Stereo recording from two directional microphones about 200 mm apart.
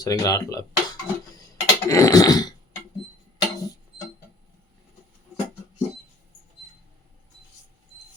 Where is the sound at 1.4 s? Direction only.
15° left (ahead or behind).